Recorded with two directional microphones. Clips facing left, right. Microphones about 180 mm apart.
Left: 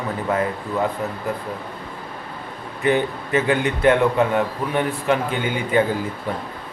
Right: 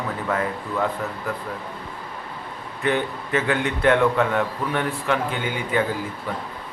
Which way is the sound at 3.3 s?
15° left (ahead or behind).